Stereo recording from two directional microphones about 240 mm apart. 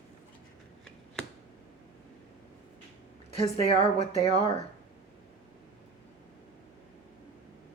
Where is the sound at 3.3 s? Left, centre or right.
Left.